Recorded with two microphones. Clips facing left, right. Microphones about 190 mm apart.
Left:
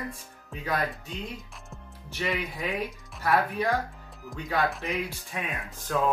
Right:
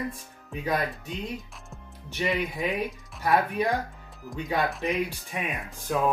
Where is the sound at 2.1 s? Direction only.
20° right (ahead or behind).